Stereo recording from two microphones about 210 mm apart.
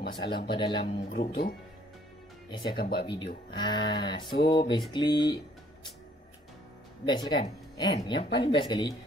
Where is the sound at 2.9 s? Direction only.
20° left (ahead or behind).